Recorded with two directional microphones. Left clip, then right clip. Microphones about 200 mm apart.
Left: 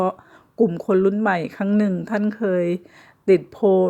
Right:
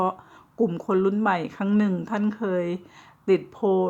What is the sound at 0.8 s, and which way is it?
Speech, 20° left (ahead or behind).